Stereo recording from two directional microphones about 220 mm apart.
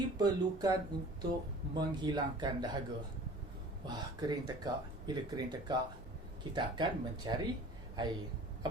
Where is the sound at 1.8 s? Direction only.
20° right (ahead or behind).